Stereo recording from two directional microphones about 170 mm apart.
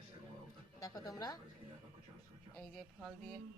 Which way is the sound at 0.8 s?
20° left (ahead or behind).